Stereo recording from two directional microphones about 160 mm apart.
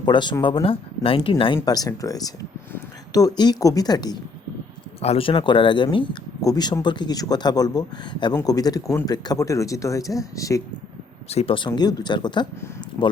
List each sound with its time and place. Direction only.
0.0 s speech: 30° left (ahead or behind)
4.9 s speech: 40° left (ahead or behind); by 10.6 s 20° left (ahead or behind)
11.3 s speech: 40° left (ahead or behind)